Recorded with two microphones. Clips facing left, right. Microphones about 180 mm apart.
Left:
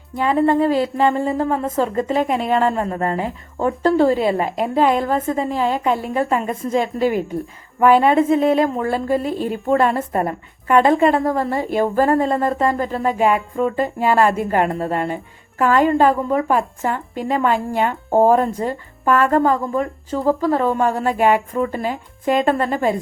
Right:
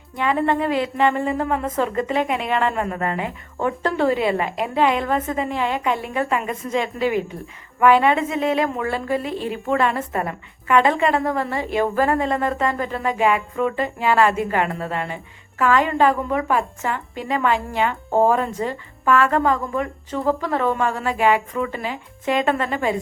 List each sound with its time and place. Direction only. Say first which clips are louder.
0.2 s a woman's voice: left 4 dB; 35° left (ahead or behind)